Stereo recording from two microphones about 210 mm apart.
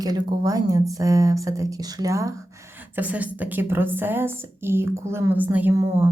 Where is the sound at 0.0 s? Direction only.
15° right (ahead or behind).